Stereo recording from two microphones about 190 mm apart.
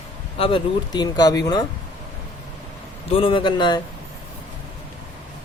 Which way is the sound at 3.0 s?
30° left (ahead or behind).